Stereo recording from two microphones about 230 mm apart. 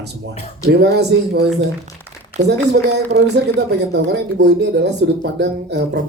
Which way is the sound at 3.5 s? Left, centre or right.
Right.